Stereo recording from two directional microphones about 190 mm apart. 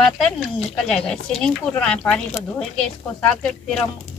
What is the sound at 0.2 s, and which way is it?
Speech, centre (ahead or behind).